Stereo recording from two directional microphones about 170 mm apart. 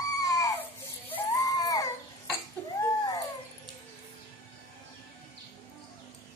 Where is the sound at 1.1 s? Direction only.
20° left (ahead or behind).